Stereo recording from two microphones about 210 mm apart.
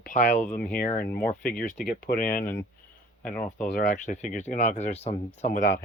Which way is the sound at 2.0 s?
40° left (ahead or behind).